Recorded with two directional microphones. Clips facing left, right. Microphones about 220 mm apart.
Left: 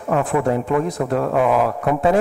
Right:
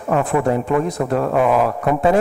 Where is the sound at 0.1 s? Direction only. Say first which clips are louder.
Right 1 dB; 30° right (ahead or behind).